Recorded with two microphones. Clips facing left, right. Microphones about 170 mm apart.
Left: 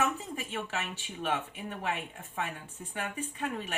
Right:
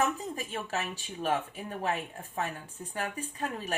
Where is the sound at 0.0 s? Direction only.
40° right (ahead or behind).